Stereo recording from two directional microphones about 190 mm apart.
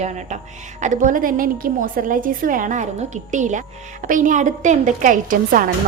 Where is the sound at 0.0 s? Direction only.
40° right (ahead or behind).